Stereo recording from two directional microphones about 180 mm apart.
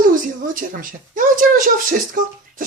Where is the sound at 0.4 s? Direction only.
50° right (ahead or behind).